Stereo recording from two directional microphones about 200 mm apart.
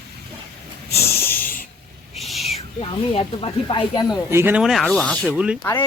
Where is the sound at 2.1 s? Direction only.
Centre (ahead or behind).